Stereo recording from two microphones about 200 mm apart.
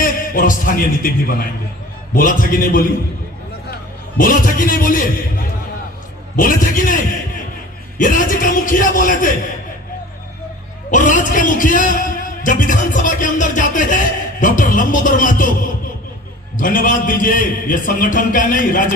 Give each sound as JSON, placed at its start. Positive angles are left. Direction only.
{"t": 0.0, "sound": "a man's voice", "side_deg": 45}
{"t": 4.2, "sound": "a man's voice", "side_deg": 45}
{"t": 10.9, "sound": "a sound", "side_deg": 40}
{"t": 16.6, "sound": "a man's voice", "side_deg": 40}